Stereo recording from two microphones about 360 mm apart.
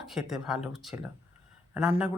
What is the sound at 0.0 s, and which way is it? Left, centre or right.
Speech, centre.